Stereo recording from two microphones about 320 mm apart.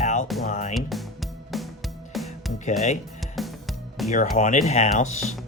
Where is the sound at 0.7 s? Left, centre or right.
Centre.